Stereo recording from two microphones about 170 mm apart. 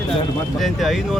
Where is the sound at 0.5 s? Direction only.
Centre (ahead or behind).